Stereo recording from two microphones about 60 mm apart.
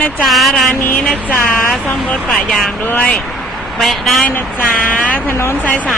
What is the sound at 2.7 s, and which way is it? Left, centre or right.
Speech, left.